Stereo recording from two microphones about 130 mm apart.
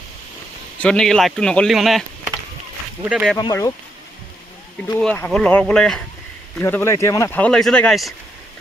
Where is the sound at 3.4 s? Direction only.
25° left (ahead or behind).